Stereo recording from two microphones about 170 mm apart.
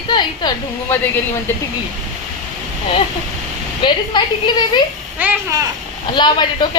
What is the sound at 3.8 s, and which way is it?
A woman's voice, 25° left (ahead or behind).